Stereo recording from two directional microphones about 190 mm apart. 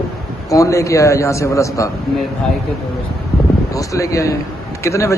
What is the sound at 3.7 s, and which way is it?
A man's voice, 15° left (ahead or behind).